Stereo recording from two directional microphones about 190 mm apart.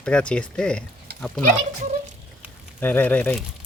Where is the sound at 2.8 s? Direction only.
10° left (ahead or behind).